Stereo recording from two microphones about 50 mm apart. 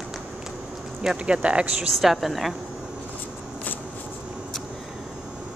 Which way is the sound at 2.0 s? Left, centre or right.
Centre.